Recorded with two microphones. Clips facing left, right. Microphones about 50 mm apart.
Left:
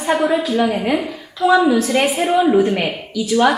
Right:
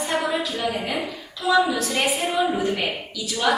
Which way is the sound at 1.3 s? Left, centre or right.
Left.